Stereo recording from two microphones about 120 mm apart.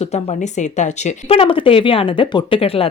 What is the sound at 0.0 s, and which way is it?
Speech, 65° left (ahead or behind).